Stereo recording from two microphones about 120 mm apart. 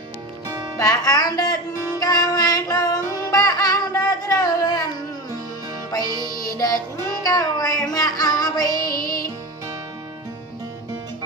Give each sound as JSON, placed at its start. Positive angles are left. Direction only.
{"t": 0.4, "sound": "music", "side_deg": -35}
{"t": 0.8, "sound": "speech", "side_deg": 30}
{"t": 2.0, "sound": "music", "side_deg": 35}
{"t": 5.9, "sound": "music", "side_deg": 30}